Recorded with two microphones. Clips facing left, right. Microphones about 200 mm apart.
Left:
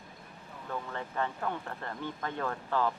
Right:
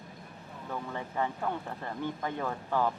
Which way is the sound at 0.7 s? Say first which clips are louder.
Right 1 dB; 15° right (ahead or behind).